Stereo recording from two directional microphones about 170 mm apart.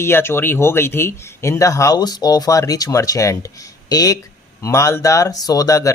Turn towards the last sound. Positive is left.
turn(degrees=20)  # may be behind; listen again after turning